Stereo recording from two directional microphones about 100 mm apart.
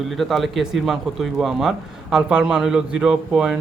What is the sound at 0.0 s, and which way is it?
Speech, centre (ahead or behind).